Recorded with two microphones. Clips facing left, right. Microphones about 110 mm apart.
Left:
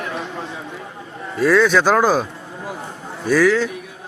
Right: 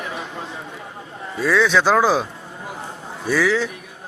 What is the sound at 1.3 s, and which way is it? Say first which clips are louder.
A man's voice: left 3 dB; centre (ahead or behind).